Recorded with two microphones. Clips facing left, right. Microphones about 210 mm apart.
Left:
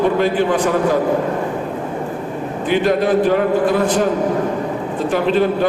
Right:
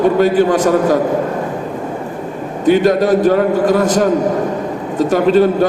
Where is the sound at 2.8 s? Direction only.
40° right (ahead or behind).